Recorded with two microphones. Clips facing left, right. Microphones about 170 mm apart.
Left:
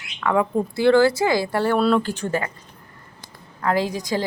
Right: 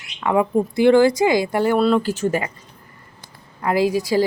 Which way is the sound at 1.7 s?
Centre (ahead or behind).